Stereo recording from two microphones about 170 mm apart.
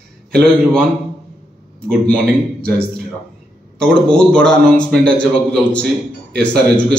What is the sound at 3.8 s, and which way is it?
A man's voice, 5° left (ahead or behind).